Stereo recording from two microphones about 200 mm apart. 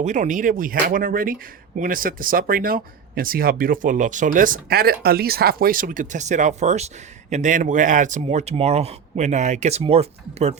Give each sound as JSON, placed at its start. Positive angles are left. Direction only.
{"t": 0.0, "sound": "speech", "side_deg": -40}